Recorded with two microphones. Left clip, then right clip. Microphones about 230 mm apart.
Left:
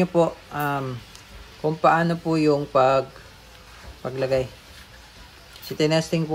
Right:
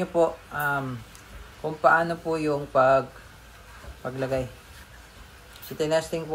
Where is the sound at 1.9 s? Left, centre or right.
Left.